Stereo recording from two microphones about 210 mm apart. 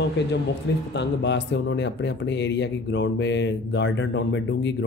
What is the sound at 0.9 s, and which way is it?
Speech, 55° left (ahead or behind).